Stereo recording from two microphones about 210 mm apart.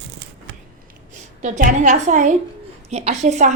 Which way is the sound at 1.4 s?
35° right (ahead or behind).